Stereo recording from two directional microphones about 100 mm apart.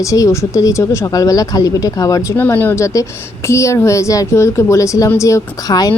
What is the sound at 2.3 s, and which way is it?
Speech, 20° left (ahead or behind).